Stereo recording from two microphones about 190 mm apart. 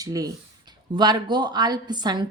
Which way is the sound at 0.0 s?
20° right (ahead or behind).